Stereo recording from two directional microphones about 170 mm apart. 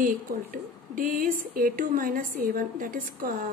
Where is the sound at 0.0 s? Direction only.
55° right (ahead or behind).